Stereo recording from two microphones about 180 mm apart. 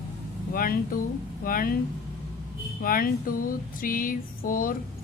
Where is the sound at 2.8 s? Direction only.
55° left (ahead or behind).